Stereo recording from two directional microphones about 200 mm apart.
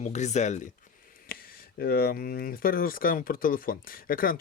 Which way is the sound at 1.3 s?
50° left (ahead or behind).